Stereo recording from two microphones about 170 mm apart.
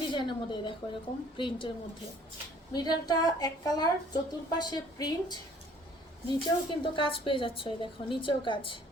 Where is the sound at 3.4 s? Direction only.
25° left (ahead or behind).